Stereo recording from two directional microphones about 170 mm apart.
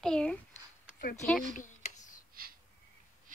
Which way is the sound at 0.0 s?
5° left (ahead or behind).